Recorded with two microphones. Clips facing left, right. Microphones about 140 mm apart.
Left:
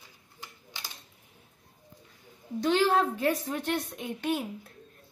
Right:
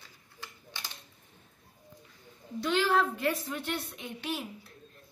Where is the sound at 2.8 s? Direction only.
40° left (ahead or behind).